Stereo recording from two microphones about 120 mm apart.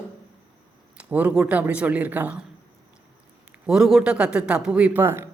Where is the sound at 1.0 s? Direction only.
15° right (ahead or behind).